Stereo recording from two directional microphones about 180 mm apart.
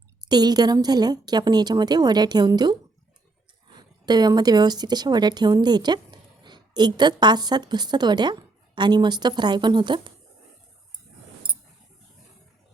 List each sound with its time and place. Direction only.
0.3 s a woman's voice: 25° right (ahead or behind)
3.8 s a woman's voice: 25° right (ahead or behind)